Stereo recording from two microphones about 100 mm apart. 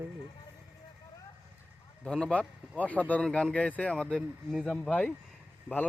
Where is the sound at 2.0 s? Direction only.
10° left (ahead or behind).